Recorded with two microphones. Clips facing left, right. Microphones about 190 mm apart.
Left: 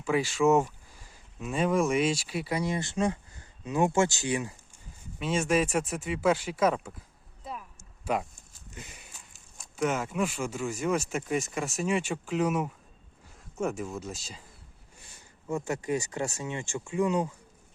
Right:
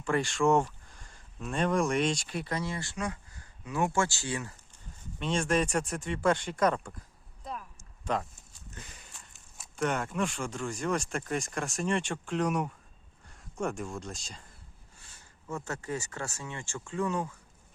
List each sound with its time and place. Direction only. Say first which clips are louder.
0.0 s speech: left 2 dB; 5° left (ahead or behind)
7.4 s a sound: even; 5° left (ahead or behind)
9.1 s speech: left 1 dB; centre (ahead or behind)
15.0 s speech: left 6 dB; 15° left (ahead or behind)